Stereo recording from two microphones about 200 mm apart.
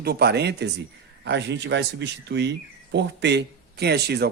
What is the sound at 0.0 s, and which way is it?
Speech, 55° right (ahead or behind).